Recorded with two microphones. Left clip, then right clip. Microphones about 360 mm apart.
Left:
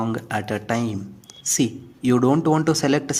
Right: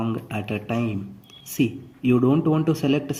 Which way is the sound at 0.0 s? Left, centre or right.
Left.